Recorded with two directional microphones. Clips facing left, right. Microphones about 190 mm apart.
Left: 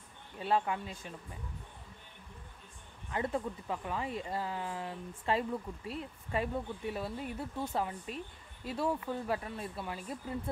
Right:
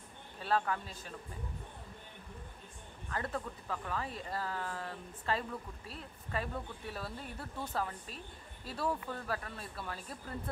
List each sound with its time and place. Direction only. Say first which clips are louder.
0.4 s speech: left 2 dB; 15° left (ahead or behind)
3.1 s speech: left 4 dB; 20° left (ahead or behind)